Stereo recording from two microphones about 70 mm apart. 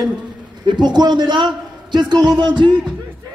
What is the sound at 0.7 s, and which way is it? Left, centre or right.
A man's voice, right.